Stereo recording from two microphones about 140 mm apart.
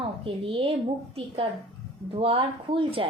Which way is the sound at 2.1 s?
40° right (ahead or behind).